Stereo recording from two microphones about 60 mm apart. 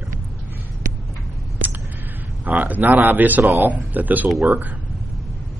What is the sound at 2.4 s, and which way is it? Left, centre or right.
A man's voice, right.